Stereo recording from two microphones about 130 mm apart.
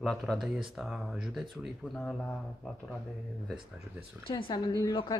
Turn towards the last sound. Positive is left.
turn(degrees=30)  # may be behind; listen again after turning